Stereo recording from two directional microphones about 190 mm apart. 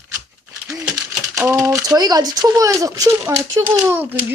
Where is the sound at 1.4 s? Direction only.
15° right (ahead or behind).